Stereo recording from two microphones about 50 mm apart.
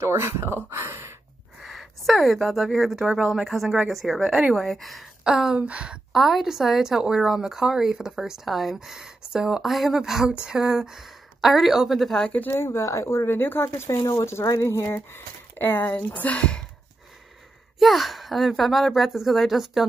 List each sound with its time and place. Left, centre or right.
0.0 s speech: right
0.7 s sigh: right
1.6 s a woman's voice: centre
5.2 s speech: centre
5.6 s a woman's voice: right
6.1 s a woman's voice: centre
12.4 s speech: left
13.8 s speech: left
15.1 s speech: left
16.1 s speech: left
17.7 s a woman's voice: centre